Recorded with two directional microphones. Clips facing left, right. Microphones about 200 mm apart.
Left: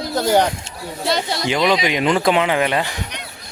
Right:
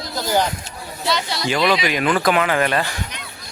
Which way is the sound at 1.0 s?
50° left (ahead or behind).